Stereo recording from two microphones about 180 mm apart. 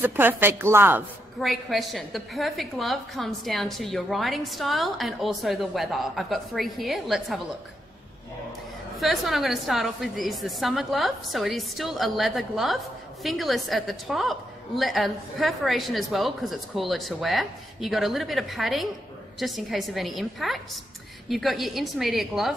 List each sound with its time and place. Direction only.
0.0 s speech: 10° right (ahead or behind)
1.4 s a woman's voice: centre (ahead or behind)
9.0 s a woman's voice: centre (ahead or behind)